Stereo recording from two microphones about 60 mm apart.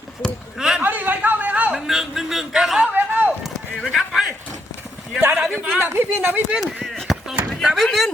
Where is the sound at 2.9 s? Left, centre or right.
Right.